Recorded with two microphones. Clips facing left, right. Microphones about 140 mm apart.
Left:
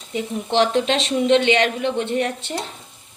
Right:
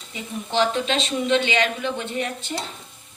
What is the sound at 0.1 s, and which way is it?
Speech, 70° left (ahead or behind).